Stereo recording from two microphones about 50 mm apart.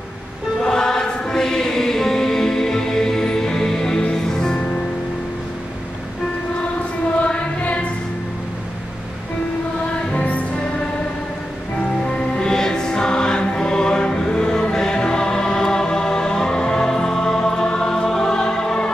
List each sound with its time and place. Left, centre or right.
0.6 s music: centre
7.2 s choir: left
10.2 s music: left
12.2 s music: centre